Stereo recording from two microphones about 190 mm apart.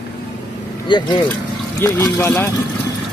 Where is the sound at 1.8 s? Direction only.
10° left (ahead or behind).